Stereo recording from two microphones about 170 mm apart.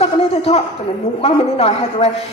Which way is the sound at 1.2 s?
35° left (ahead or behind).